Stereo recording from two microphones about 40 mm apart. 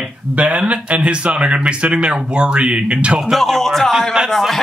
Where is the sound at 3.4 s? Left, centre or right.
Centre.